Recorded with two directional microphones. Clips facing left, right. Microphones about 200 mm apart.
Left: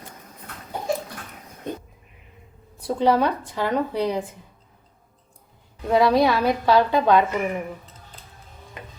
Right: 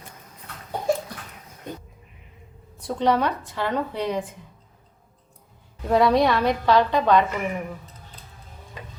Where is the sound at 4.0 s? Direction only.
35° left (ahead or behind).